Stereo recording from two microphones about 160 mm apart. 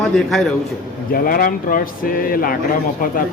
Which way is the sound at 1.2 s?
60° left (ahead or behind).